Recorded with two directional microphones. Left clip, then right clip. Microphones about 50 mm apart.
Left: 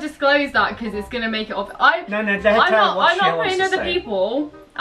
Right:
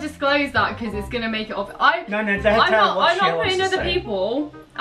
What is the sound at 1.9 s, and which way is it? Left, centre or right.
A woman's voice, right.